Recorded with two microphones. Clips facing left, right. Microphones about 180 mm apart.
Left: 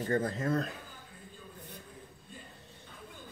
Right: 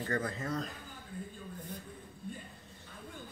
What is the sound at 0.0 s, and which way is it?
Speech, 25° left (ahead or behind).